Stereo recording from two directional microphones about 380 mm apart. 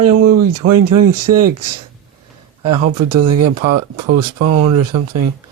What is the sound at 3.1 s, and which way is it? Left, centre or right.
Speech, right.